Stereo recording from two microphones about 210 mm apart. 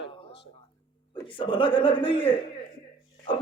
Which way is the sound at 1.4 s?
25° left (ahead or behind).